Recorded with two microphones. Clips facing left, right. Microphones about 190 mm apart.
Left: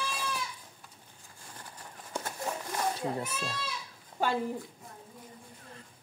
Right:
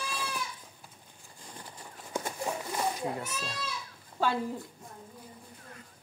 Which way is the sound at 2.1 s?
10° right (ahead or behind).